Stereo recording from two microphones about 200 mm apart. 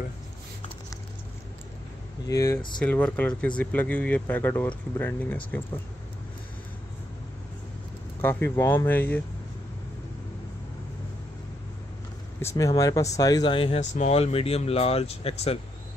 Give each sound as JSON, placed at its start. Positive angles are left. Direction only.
{"t": 2.2, "sound": "speech", "side_deg": 15}
{"t": 2.8, "sound": "speech", "side_deg": 5}
{"t": 8.2, "sound": "speech", "side_deg": 10}
{"t": 12.4, "sound": "speech", "side_deg": 15}